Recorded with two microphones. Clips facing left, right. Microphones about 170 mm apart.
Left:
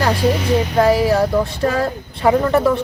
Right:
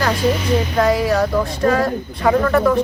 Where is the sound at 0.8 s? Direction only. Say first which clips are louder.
Left 3 dB; 30° left (ahead or behind).